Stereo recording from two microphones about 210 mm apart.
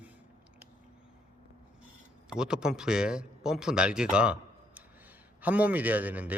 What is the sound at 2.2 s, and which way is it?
A man's voice, 5° right (ahead or behind).